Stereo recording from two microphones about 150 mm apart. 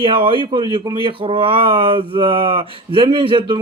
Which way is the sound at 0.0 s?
35° right (ahead or behind).